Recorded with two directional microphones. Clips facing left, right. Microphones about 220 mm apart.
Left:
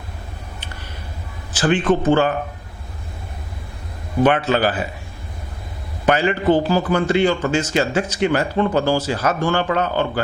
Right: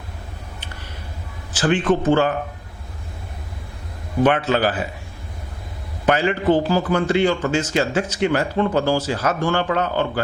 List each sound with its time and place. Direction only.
1.5 s speech: 10° left (ahead or behind)
4.2 s speech: 15° left (ahead or behind)
6.1 s speech: 15° left (ahead or behind)